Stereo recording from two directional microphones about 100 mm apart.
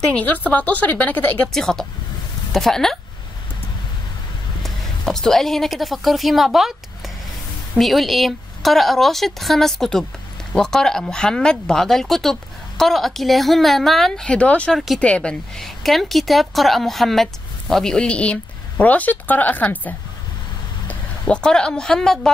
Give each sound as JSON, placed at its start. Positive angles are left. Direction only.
{"t": 0.1, "sound": "a woman's voice", "side_deg": 15}
{"t": 1.5, "sound": "speech", "side_deg": 5}
{"t": 4.6, "sound": "a woman's voice", "side_deg": 5}
{"t": 7.7, "sound": "a woman's voice", "side_deg": 0}
{"t": 21.3, "sound": "a woman's voice", "side_deg": 10}